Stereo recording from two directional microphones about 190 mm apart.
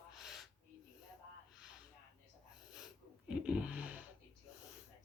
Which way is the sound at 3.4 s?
5° right (ahead or behind).